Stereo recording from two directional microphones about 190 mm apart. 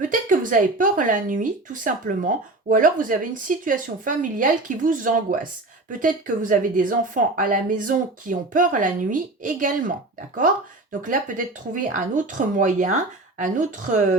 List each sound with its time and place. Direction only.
0.1 s speech: 45° right (ahead or behind)
11.0 s speech: 45° right (ahead or behind)